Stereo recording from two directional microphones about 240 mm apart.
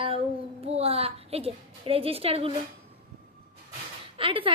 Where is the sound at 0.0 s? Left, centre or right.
Right.